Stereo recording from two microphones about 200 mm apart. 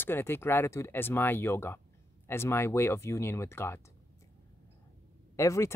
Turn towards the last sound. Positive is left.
turn(degrees=15)  # may be behind; listen again after turning